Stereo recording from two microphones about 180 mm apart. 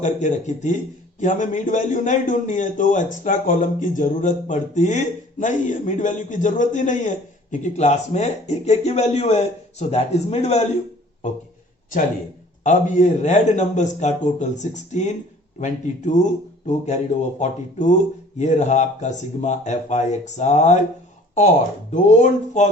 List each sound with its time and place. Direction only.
0.0 s a man's voice: 45° left (ahead or behind)
12.6 s a man's voice: 45° left (ahead or behind)
21.9 s a man's voice: 45° left (ahead or behind)